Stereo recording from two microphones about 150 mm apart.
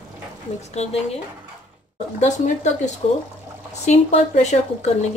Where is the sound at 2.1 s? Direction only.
55° left (ahead or behind).